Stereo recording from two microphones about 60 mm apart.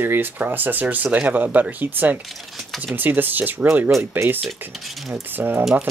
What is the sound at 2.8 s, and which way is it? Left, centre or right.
Speech, right.